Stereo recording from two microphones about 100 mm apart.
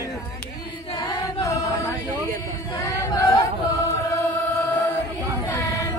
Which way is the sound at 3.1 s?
35° left (ahead or behind).